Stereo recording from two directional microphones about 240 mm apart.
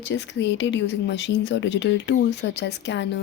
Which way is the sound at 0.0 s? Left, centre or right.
Left.